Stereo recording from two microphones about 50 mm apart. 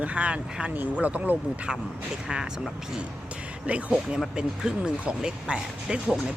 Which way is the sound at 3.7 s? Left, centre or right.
Right.